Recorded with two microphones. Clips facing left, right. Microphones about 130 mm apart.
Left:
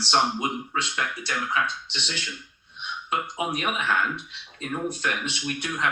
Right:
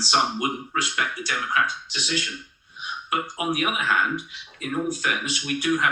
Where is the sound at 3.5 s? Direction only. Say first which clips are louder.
Right 4 dB; 30° left (ahead or behind).